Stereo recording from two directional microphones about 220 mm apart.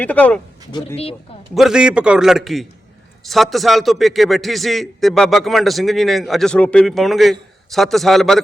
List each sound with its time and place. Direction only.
0.0 s speech: 5° left (ahead or behind)
0.7 s speech: 20° left (ahead or behind)
1.5 s a man's voice: 5° right (ahead or behind)